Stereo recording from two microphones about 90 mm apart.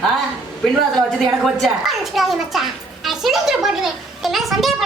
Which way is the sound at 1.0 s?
5° left (ahead or behind).